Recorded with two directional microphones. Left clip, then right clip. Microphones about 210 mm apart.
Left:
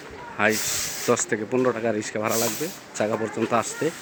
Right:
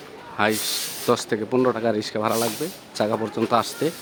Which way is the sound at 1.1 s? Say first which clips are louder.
Right 1 dB; 10° right (ahead or behind).